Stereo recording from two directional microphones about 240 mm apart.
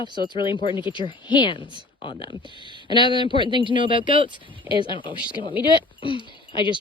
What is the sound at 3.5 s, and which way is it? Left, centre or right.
Speech, centre.